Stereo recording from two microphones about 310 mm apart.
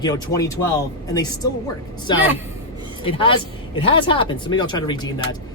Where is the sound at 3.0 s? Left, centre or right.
Centre.